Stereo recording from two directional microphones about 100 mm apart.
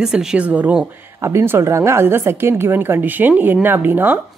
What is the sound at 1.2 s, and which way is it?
A woman's voice, 25° right (ahead or behind).